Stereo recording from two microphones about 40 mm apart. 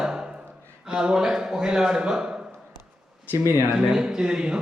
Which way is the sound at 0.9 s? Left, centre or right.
Centre.